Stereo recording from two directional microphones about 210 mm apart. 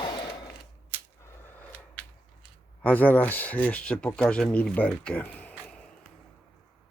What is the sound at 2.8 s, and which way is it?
Speech, 10° left (ahead or behind).